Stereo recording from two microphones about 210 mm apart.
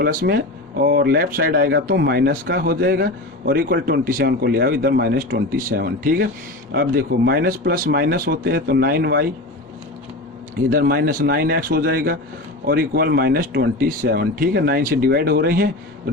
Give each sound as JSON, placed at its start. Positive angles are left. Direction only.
{"t": 0.0, "sound": "speech", "side_deg": -45}
{"t": 10.7, "sound": "speech", "side_deg": -45}